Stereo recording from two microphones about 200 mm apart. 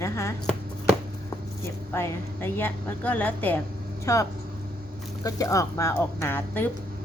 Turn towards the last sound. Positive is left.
turn(degrees=10)  # may be behind; listen again after turning